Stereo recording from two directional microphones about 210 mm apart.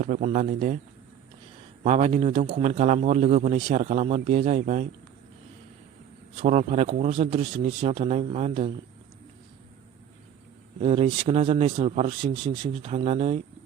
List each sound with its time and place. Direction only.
0.0 s a man's voice: 40° right (ahead or behind)
1.8 s a man's voice: 35° right (ahead or behind)
6.4 s speech: 30° right (ahead or behind)
10.8 s speech: 25° right (ahead or behind)